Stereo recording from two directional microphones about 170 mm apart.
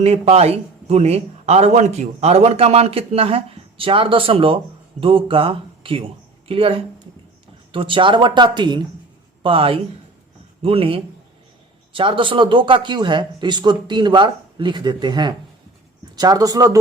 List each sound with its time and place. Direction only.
0.0 s a man's voice: 40° right (ahead or behind); by 16.7 s 20° right (ahead or behind)